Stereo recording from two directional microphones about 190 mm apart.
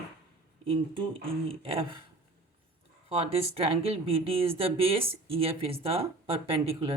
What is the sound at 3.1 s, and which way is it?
Speech, 30° right (ahead or behind).